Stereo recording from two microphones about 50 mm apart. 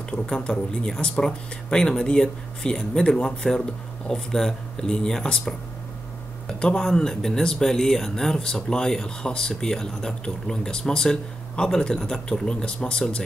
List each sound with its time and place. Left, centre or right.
0.3 s speech: centre
6.6 s speech: centre